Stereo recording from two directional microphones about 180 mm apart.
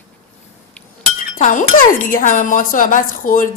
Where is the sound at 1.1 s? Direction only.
45° left (ahead or behind).